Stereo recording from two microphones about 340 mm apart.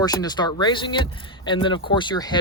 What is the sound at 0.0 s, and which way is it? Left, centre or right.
Speech, centre.